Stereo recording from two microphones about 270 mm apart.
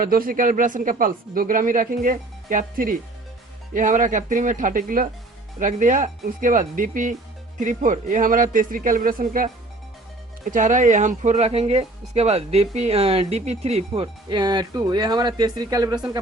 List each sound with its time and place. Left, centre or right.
0.0 s speech: right; by 16.0 s centre